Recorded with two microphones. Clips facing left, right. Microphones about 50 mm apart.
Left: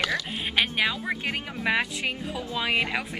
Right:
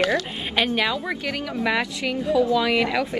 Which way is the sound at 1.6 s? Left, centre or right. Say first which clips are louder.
Right 2 dB; left.